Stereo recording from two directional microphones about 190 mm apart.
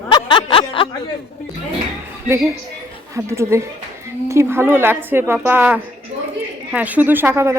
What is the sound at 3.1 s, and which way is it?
A woman's voice, 15° right (ahead or behind).